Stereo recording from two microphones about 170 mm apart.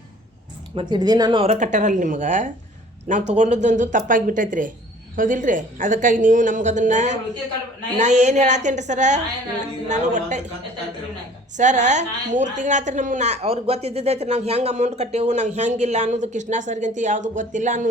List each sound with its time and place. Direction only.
0.8 s speech: 25° right (ahead or behind)
1.5 s a woman's voice: 45° right (ahead or behind)
11.5 s a woman's voice: 45° right (ahead or behind)